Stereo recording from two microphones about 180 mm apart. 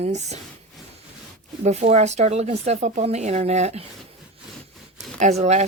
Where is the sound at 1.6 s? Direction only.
40° right (ahead or behind).